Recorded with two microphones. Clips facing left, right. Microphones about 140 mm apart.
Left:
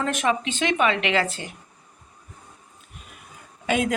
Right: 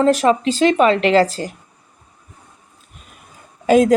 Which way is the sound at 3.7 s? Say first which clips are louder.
Right 11 dB; 35° right (ahead or behind).